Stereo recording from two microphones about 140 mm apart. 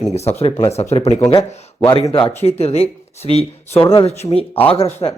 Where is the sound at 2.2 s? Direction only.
50° left (ahead or behind).